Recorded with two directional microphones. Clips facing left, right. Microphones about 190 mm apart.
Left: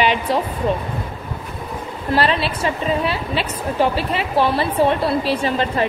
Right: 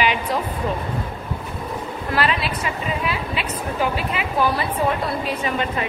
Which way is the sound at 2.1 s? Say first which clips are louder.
Left 4 dB; 30° left (ahead or behind).